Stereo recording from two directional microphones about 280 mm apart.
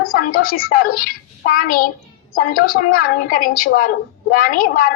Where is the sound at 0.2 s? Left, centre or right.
Left.